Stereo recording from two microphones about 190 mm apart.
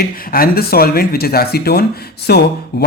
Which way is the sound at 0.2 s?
50° left (ahead or behind).